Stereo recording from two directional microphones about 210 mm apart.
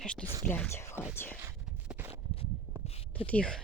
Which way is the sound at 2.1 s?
30° left (ahead or behind).